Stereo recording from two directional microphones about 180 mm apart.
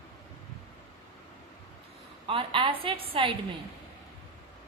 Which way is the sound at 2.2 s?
30° right (ahead or behind).